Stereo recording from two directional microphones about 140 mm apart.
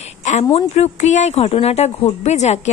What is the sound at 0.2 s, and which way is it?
Speech, 55° left (ahead or behind).